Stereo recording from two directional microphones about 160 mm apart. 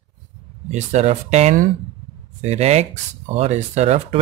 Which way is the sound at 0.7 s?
45° right (ahead or behind).